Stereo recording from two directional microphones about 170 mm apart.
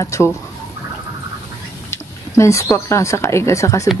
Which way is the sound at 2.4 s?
15° left (ahead or behind).